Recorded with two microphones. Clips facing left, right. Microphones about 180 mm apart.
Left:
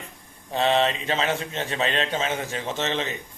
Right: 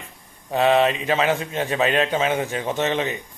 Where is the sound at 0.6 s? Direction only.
30° left (ahead or behind).